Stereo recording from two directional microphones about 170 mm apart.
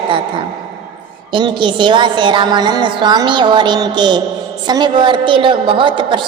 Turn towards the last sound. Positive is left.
turn(degrees=-30)  # may be behind; listen again after turning